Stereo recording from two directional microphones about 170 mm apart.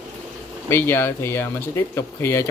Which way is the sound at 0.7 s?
15° left (ahead or behind).